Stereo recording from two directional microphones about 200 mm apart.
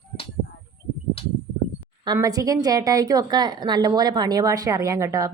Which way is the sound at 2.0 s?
20° right (ahead or behind).